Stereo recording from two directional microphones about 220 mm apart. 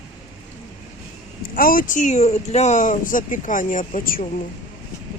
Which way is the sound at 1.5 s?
40° left (ahead or behind).